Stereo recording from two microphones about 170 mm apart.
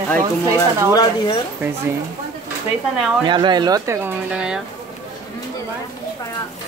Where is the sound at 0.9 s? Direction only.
25° left (ahead or behind).